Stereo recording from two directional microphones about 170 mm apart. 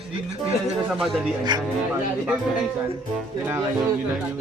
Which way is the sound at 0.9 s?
Centre (ahead or behind).